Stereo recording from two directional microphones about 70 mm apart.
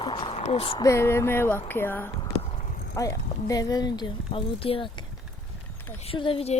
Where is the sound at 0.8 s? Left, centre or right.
Left.